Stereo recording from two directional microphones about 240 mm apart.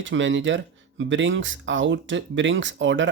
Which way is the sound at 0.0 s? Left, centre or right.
Right.